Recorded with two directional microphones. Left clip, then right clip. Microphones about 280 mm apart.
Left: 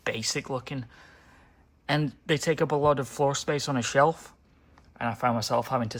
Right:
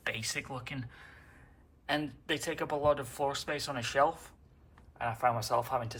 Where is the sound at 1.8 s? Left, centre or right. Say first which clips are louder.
Left 5 dB; left.